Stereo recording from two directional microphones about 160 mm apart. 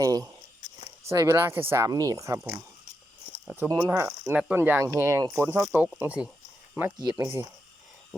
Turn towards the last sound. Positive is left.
turn(degrees=-20)  # may be behind; listen again after turning